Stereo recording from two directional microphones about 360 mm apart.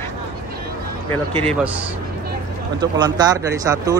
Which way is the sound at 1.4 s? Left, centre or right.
Centre.